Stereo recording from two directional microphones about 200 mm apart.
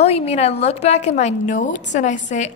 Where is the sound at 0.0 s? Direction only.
30° left (ahead or behind).